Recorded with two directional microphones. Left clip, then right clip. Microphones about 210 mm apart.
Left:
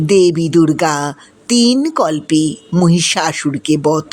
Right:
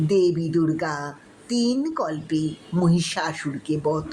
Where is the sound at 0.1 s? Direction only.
40° left (ahead or behind).